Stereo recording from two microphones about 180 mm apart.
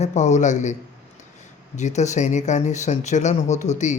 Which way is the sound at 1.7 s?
40° left (ahead or behind).